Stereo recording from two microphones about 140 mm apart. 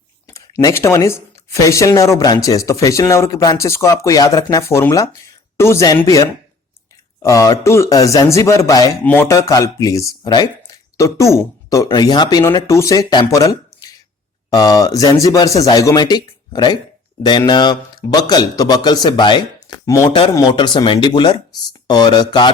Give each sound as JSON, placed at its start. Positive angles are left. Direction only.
{"t": 0.3, "sound": "speech", "side_deg": 20}
{"t": 7.2, "sound": "speech", "side_deg": 25}
{"t": 9.0, "sound": "a sound", "side_deg": 15}
{"t": 9.3, "sound": "speech", "side_deg": 20}